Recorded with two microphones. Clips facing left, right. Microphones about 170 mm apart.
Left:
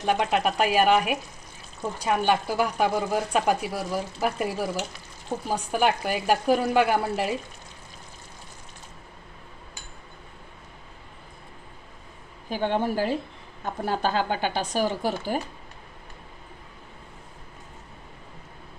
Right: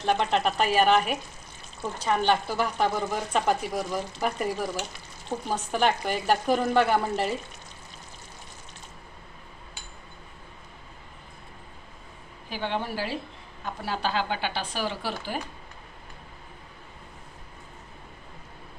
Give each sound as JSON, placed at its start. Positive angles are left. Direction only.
{"t": 0.0, "sound": "speech", "side_deg": 10}
{"t": 12.4, "sound": "speech", "side_deg": 45}